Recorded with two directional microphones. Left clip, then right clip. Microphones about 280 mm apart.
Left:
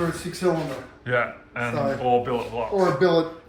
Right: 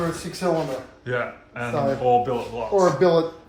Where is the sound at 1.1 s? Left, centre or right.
Centre.